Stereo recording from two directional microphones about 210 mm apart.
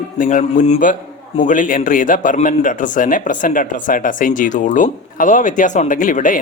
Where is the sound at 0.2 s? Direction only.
35° left (ahead or behind).